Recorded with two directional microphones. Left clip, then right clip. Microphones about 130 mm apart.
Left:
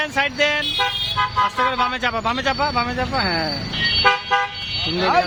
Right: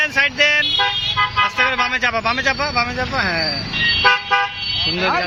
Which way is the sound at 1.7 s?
20° left (ahead or behind).